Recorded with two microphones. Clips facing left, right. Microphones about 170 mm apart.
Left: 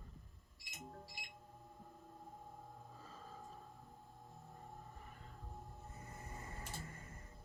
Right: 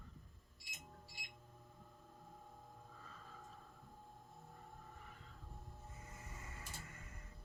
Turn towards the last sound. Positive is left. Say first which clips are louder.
# left 4 dB
turn(degrees=35)  # may be behind; listen again after turning